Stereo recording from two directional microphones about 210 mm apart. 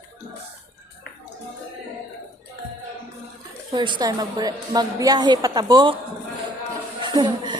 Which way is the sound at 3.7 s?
25° right (ahead or behind).